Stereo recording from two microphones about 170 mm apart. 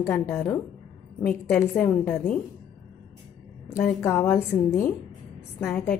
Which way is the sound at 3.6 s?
15° left (ahead or behind).